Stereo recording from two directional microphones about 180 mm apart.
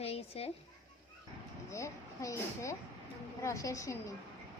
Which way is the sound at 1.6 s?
15° left (ahead or behind).